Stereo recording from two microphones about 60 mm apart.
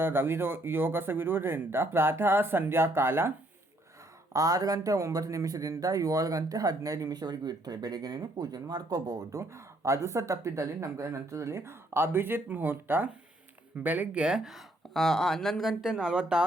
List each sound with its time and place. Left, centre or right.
0.0 s speech: right
4.3 s a man's voice: right
7.6 s speech: right
9.4 s speech: right
14.1 s speech: centre
14.9 s speech: centre
15.8 s speech: centre